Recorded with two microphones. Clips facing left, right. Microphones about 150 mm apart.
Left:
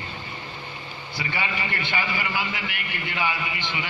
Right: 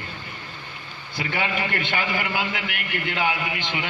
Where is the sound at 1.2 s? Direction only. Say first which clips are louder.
Right 4 dB; 55° right (ahead or behind).